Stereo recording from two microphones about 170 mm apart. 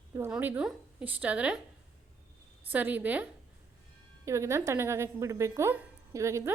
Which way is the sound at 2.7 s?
10° right (ahead or behind).